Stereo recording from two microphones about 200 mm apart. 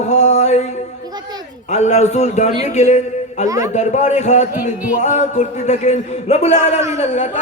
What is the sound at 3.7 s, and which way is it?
Music, 35° left (ahead or behind).